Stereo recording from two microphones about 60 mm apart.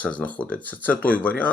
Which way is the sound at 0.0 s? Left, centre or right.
Left.